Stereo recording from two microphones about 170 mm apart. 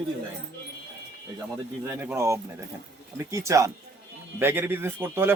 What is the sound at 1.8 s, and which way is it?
A man's voice, 10° right (ahead or behind).